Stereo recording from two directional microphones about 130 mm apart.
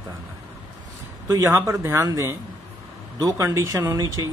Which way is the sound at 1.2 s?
25° right (ahead or behind).